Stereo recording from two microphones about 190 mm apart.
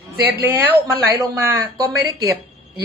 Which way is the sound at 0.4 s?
10° right (ahead or behind).